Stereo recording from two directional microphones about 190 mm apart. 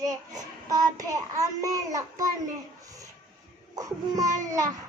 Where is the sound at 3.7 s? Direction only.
20° right (ahead or behind).